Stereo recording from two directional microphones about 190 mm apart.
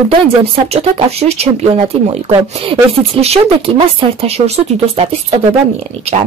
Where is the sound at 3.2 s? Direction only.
30° right (ahead or behind).